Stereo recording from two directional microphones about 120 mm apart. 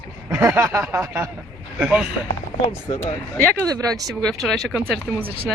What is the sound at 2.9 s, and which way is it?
Speech, 55° left (ahead or behind).